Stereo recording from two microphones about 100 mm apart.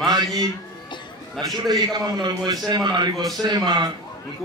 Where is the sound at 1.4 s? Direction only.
40° right (ahead or behind).